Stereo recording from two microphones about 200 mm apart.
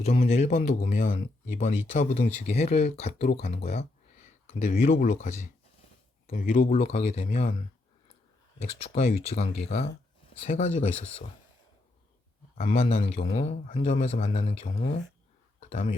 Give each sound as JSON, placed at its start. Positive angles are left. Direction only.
{"t": 0.0, "sound": "speech", "side_deg": 30}
{"t": 8.6, "sound": "speech", "side_deg": 30}
{"t": 12.5, "sound": "speech", "side_deg": 35}